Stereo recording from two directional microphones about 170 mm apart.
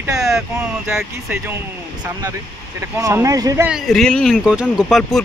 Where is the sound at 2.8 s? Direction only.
15° right (ahead or behind).